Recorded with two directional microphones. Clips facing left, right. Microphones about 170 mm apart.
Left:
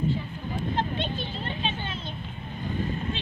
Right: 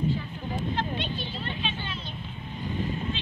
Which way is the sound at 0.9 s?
45° left (ahead or behind).